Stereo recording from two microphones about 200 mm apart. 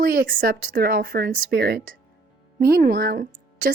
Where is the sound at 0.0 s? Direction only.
45° right (ahead or behind).